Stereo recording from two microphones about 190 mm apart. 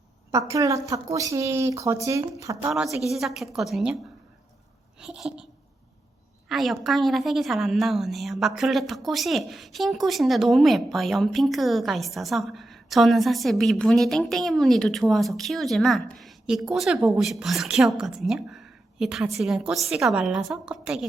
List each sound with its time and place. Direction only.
0.3 s a woman's voice: 15° right (ahead or behind)
3.0 s a woman's voice: centre (ahead or behind)
4.9 s a woman's voice: centre (ahead or behind)
6.5 s a woman's voice: centre (ahead or behind)